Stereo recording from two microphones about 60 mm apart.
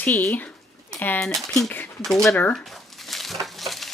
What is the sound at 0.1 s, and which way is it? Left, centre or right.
Speech, left.